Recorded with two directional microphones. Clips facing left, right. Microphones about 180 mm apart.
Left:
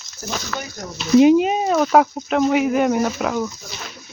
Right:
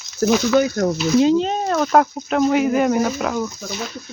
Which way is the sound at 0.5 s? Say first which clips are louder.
Right 15 dB; 90° right.